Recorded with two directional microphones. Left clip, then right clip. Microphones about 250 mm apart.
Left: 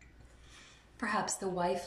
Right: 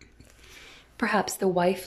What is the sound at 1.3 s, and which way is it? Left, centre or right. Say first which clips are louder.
Speech: right 9 dB; right.